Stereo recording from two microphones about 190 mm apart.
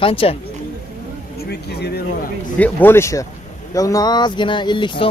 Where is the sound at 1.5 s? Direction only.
60° left (ahead or behind).